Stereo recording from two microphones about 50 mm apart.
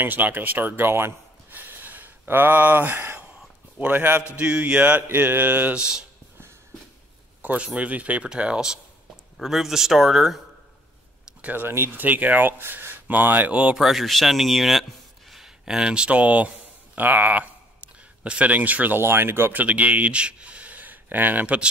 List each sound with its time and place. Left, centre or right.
0.0 s speech: right
4.4 s speech: right
5.1 s speech: right
5.8 s speech: centre
7.4 s speech: right
8.3 s speech: centre
9.4 s speech: centre
11.4 s speech: right
12.0 s speech: right
13.7 s speech: centre
15.6 s speech: centre; by 18.9 s right
18.9 s speech: right
19.5 s speech: right